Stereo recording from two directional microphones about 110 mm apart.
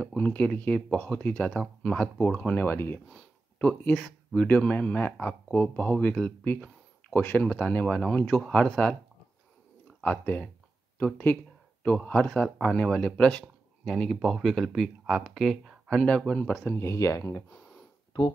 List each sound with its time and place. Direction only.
0.0 s speech: 15° left (ahead or behind)
3.9 s speech: 5° left (ahead or behind)
4.5 s speech: 15° left (ahead or behind)
10.2 s speech: 15° left (ahead or behind)
16.6 s speech: 25° left (ahead or behind)